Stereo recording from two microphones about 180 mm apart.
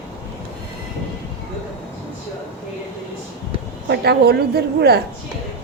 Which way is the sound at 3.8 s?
65° right (ahead or behind).